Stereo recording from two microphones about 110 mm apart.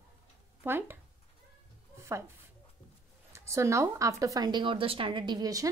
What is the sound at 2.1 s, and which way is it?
Speech, 25° right (ahead or behind).